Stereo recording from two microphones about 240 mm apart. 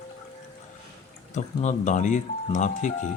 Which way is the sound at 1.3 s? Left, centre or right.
Left.